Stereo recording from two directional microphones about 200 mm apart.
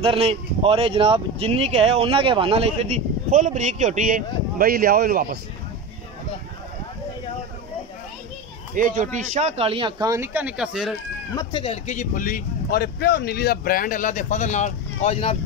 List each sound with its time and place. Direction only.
0.0 s speech: 30° right (ahead or behind); by 5.4 s 45° right (ahead or behind)
8.7 s speech: 40° right (ahead or behind); by 11.0 s centre (ahead or behind)
11.3 s speech: 25° left (ahead or behind)